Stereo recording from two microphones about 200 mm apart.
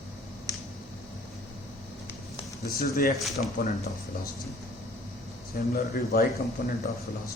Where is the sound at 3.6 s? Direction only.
50° left (ahead or behind).